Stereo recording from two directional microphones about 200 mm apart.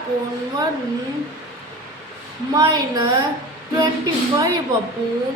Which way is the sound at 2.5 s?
20° right (ahead or behind).